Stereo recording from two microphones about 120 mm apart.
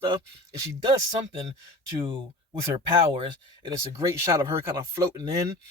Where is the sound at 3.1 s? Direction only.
40° right (ahead or behind).